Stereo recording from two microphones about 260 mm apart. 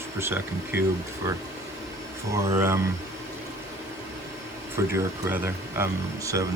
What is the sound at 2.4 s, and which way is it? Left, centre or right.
Speech, centre.